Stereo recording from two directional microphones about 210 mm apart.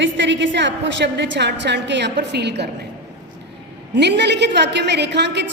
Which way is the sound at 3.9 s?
55° right (ahead or behind).